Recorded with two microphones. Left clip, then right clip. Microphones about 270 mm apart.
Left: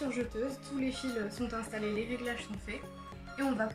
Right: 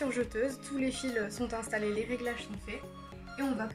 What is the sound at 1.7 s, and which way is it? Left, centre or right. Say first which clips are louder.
Speech: right 5 dB; right.